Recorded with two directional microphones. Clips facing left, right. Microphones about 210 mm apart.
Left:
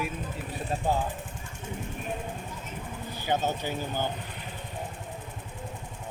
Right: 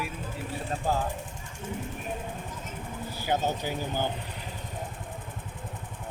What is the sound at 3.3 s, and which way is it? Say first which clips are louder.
Speech: even; 10° right (ahead or behind).